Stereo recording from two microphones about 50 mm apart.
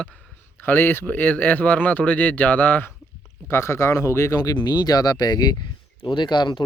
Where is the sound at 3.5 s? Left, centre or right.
Left.